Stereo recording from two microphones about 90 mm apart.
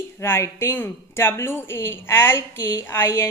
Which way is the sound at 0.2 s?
30° left (ahead or behind).